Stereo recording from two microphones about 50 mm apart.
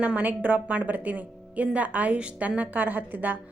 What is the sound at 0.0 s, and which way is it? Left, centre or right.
A woman's voice, right.